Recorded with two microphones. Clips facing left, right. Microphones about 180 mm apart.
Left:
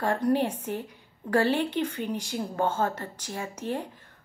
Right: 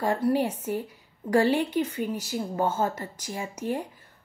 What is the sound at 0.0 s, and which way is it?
A woman's voice, 10° right (ahead or behind).